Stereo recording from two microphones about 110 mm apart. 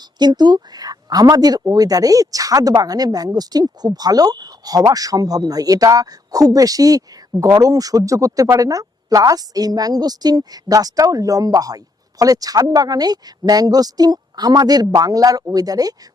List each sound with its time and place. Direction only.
0.2 s speech: 40° right (ahead or behind)